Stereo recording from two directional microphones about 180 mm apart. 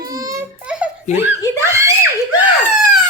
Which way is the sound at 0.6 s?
5° right (ahead or behind).